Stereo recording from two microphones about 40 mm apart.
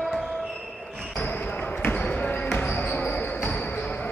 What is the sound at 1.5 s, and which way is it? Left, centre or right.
Basketball bounce, left.